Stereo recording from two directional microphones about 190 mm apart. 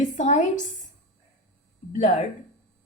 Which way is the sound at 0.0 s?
40° left (ahead or behind).